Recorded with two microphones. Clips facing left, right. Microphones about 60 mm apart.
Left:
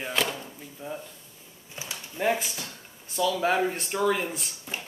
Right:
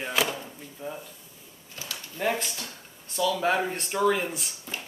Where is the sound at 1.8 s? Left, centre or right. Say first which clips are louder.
Left 1 dB; centre.